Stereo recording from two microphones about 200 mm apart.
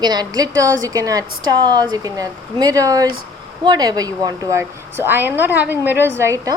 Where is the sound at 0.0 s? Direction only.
20° right (ahead or behind).